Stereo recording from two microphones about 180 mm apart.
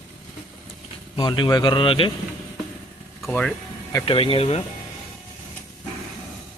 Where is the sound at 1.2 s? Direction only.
25° left (ahead or behind).